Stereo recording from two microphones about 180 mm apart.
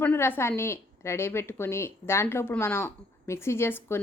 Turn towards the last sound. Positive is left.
turn(degrees=15)  # may be behind; listen again after turning